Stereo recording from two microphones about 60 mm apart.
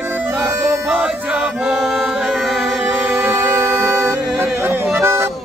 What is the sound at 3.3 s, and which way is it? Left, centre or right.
Music, right.